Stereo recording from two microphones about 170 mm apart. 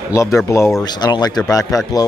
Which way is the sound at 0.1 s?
20° left (ahead or behind).